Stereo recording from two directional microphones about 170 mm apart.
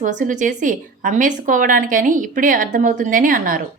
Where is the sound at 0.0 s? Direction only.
50° right (ahead or behind).